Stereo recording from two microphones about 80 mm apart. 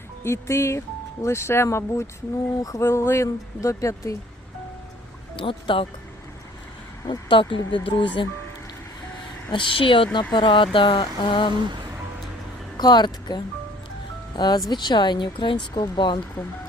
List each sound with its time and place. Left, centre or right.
0.2 s speech: left
2.6 s speech: left
2.8 s speech: left
5.4 s speech: left
7.1 s speech: left
9.5 s speech: left
11.5 s music: right
12.7 s speech: left
15.7 s speech: left